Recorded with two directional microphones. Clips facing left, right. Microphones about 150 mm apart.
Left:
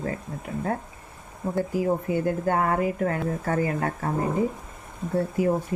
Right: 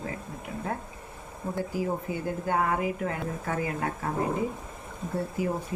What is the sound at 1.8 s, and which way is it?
Speech, 60° left (ahead or behind).